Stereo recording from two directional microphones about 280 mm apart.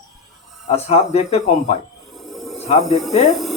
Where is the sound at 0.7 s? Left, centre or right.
Left.